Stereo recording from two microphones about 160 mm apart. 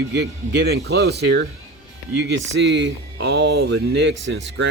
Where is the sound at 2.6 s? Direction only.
90° right.